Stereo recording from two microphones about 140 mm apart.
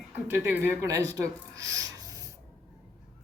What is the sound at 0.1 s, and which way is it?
Speech, 15° right (ahead or behind).